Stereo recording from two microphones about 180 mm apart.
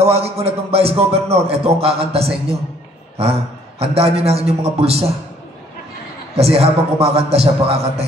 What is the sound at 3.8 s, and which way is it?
A man's voice, 35° right (ahead or behind).